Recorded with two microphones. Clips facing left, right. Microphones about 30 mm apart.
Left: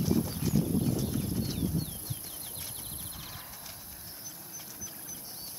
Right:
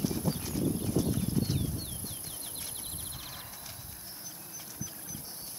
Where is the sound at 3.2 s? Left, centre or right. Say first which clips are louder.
Even; centre.